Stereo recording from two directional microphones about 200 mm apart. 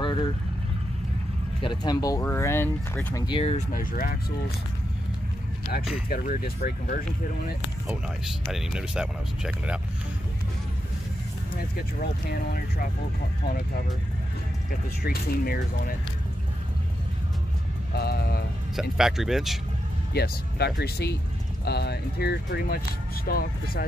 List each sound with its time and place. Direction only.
0.0 s vehicle: 20° left (ahead or behind)
1.6 s speech: 20° left (ahead or behind)
3.3 s speech: 30° left (ahead or behind); by 4.2 s 45° left (ahead or behind)
6.0 s speech: 45° left (ahead or behind)
8.5 s speech: 5° right (ahead or behind)
11.5 s speech: 50° left (ahead or behind)
15.0 s speech: 50° left (ahead or behind)
17.9 s speech: 55° left (ahead or behind)
18.8 s speech: centre (ahead or behind)
20.2 s speech: 55° left (ahead or behind)